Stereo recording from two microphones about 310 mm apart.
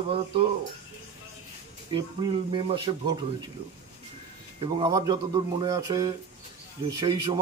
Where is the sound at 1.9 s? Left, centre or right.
Centre.